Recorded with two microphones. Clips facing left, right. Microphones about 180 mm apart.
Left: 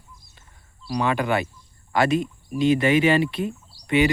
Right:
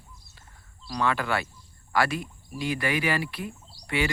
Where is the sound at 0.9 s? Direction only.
20° left (ahead or behind).